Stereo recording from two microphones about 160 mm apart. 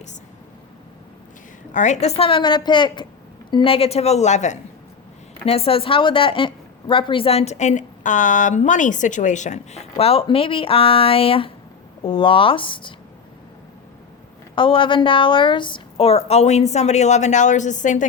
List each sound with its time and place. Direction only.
1.7 s a woman's voice: 50° left (ahead or behind)
10.0 s speech: 35° left (ahead or behind)
14.5 s a woman's voice: 30° left (ahead or behind); by 18.1 s 50° left (ahead or behind)